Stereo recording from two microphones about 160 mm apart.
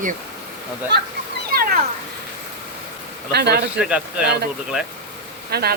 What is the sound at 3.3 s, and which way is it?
Speech, 90° right.